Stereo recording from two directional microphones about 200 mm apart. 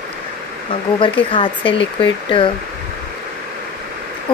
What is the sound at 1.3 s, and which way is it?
Speech, 25° left (ahead or behind).